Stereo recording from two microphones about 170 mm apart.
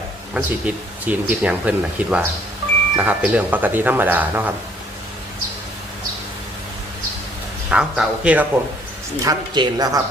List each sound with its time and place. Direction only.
0.3 s speech: 10° right (ahead or behind)
7.7 s speech: 5° right (ahead or behind)
9.2 s a woman's voice: 20° right (ahead or behind)